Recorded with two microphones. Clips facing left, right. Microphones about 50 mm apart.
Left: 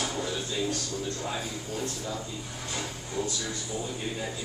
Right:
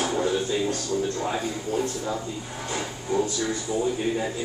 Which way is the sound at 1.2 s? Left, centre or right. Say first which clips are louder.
Right 6 dB; right.